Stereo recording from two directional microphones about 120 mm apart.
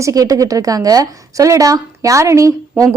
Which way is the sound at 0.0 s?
30° right (ahead or behind).